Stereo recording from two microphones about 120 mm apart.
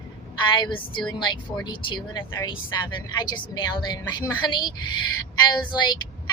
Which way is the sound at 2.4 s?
40° left (ahead or behind).